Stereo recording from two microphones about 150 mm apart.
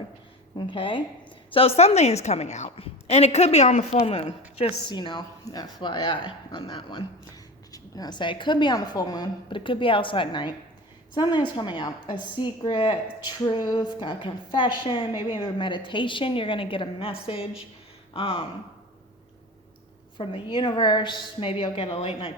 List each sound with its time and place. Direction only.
0.5 s a woman's voice: 35° left (ahead or behind)
20.1 s a woman's voice: 30° left (ahead or behind)